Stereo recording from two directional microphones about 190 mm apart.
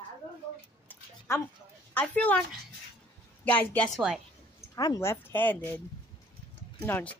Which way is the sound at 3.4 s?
10° left (ahead or behind).